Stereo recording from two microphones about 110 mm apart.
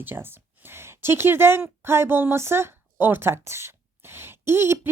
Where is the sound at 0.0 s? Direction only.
20° right (ahead or behind).